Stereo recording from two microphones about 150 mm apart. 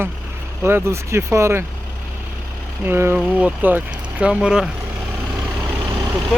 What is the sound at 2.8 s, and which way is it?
Speech, 15° right (ahead or behind).